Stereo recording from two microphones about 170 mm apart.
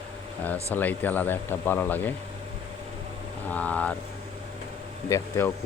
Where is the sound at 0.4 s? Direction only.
10° left (ahead or behind).